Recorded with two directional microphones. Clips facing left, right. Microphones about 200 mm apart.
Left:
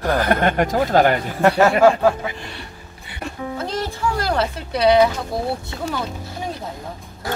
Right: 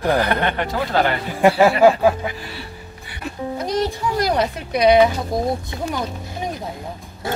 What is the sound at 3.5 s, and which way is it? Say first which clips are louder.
Speech: right 6 dB; 15° right (ahead or behind).